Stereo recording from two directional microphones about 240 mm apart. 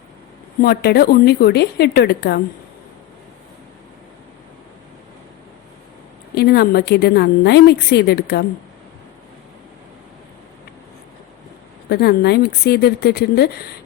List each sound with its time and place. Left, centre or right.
0.6 s a woman's voice: left
6.3 s a woman's voice: left
11.9 s a woman's voice: left